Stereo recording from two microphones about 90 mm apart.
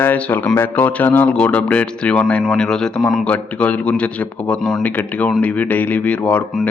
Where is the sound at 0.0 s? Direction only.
20° left (ahead or behind).